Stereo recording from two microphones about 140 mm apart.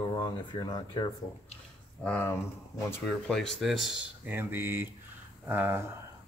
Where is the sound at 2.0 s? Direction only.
15° left (ahead or behind).